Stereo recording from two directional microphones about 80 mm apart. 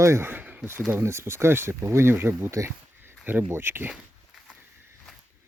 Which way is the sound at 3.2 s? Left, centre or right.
Right.